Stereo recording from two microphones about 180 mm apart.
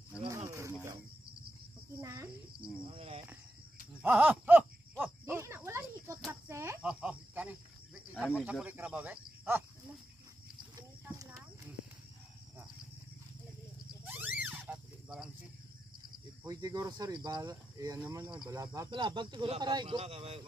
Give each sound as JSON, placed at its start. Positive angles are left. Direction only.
{"t": 0.2, "sound": "snake", "side_deg": -20}
{"t": 2.0, "sound": "a sound", "side_deg": -20}
{"t": 2.9, "sound": "cricket", "side_deg": -30}
{"t": 4.0, "sound": "a sound", "side_deg": -10}
{"t": 5.2, "sound": "snake", "side_deg": -15}
{"t": 6.5, "sound": "cricket", "side_deg": -15}
{"t": 8.4, "sound": "speech", "side_deg": -5}
{"t": 10.8, "sound": "clip-clop", "side_deg": -15}
{"t": 14.0, "sound": "wild animals", "side_deg": -10}
{"t": 14.4, "sound": "a sound", "side_deg": -10}
{"t": 16.4, "sound": "speech", "side_deg": -20}